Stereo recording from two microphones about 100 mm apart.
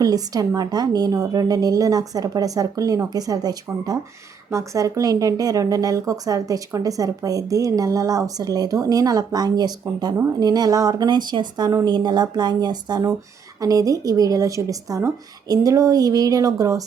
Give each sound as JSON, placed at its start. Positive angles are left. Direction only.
{"t": 0.0, "sound": "speech", "side_deg": -40}